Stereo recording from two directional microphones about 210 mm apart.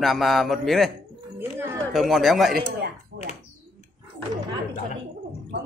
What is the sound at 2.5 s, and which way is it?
Speech, 50° right (ahead or behind).